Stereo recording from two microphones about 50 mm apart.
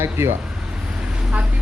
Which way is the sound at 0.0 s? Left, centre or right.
Right.